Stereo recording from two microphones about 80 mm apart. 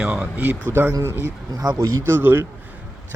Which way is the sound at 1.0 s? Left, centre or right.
Right.